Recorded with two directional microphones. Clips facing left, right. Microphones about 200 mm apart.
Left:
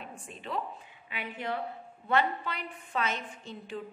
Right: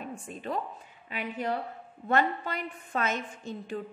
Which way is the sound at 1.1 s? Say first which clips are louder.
Right 3 dB; 40° right (ahead or behind).